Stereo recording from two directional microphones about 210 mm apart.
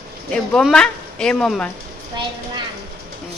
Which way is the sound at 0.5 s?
5° left (ahead or behind).